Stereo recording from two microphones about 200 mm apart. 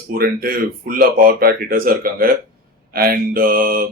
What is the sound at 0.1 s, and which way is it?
Speech, 45° right (ahead or behind).